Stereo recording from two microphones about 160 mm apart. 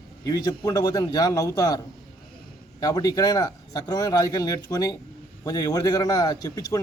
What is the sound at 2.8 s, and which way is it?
A man's voice, 25° left (ahead or behind).